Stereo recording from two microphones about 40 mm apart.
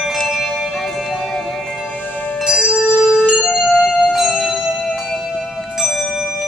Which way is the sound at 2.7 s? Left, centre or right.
Left.